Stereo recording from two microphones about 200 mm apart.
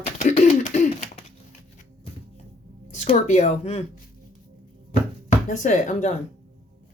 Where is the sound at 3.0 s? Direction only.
35° left (ahead or behind).